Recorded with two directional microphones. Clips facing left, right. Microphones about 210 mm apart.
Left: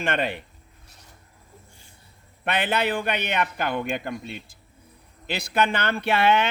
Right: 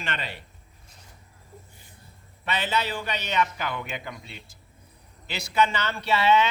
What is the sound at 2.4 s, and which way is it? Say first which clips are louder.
A man's voice: left 4 dB; 55° left (ahead or behind).